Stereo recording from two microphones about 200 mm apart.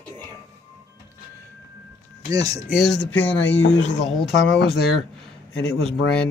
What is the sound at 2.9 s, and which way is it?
Speech, 60° left (ahead or behind).